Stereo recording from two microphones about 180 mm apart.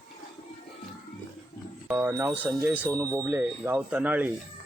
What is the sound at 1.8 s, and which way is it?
Speech, 10° right (ahead or behind).